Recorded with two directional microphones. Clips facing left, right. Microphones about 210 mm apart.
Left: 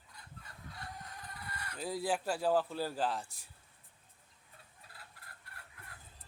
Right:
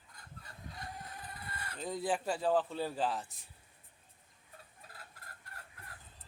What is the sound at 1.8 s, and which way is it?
A man's voice, 5° left (ahead or behind).